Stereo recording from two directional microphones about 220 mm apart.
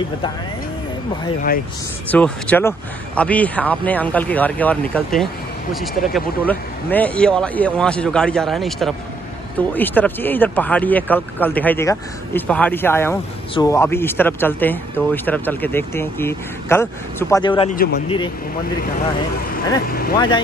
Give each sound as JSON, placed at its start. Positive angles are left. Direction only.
{"t": 2.0, "sound": "speech", "side_deg": 5}
{"t": 17.6, "sound": "speech", "side_deg": 40}
{"t": 18.0, "sound": "speech", "side_deg": 20}
{"t": 19.9, "sound": "speech", "side_deg": 45}